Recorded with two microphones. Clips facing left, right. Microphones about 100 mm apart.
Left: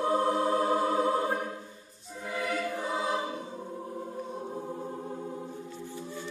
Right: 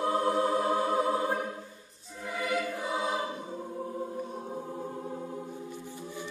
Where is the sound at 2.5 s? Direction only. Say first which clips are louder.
Right 1 dB; centre (ahead or behind).